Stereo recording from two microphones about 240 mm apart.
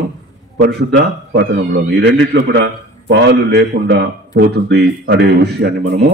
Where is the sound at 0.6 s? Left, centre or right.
Right.